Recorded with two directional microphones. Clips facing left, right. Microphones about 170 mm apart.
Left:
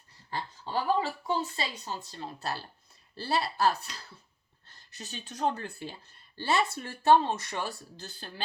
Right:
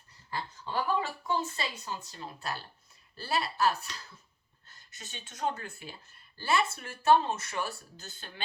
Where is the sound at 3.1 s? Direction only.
35° left (ahead or behind).